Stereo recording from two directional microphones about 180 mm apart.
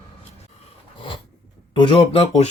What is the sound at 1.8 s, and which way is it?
Speech, 30° left (ahead or behind).